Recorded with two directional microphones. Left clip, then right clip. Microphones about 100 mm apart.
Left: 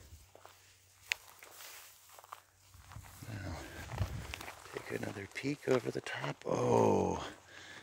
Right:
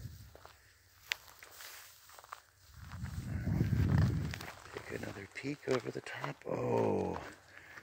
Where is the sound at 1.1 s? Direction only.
35° left (ahead or behind).